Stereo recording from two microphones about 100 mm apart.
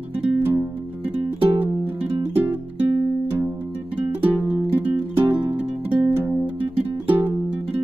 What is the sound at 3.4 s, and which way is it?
Music, 15° right (ahead or behind).